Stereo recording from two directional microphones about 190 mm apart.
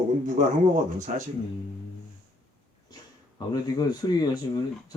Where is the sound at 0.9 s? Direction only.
40° right (ahead or behind).